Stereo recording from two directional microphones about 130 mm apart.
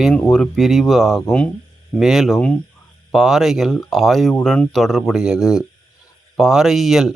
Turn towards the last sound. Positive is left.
turn(degrees=0)  # may be behind; listen again after turning